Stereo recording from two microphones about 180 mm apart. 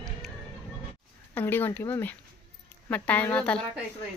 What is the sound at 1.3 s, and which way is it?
Speech, 10° left (ahead or behind).